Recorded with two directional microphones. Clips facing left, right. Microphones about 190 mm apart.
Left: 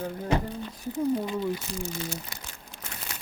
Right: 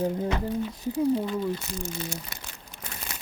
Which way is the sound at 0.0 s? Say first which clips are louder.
Right 7 dB; 20° right (ahead or behind).